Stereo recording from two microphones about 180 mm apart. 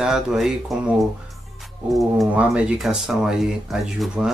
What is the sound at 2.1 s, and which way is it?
Speech, 5° right (ahead or behind).